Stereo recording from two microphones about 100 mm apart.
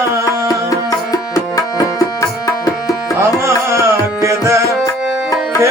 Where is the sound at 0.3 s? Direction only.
35° left (ahead or behind).